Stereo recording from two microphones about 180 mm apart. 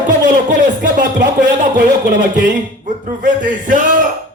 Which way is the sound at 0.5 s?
60° right (ahead or behind).